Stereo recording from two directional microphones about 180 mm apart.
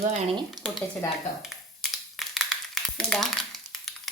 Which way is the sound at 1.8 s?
Centre (ahead or behind).